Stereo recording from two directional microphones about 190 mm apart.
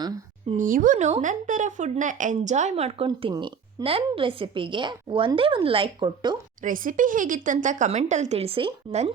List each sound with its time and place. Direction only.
0.5 s speech: 45° right (ahead or behind); by 6.3 s 25° right (ahead or behind)
6.6 s speech: 45° right (ahead or behind)